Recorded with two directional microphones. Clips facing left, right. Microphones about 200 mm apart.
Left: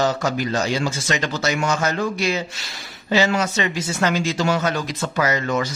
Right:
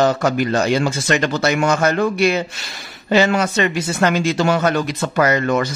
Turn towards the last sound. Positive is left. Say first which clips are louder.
# right 5 dB
turn(degrees=-55)  # may be behind; listen again after turning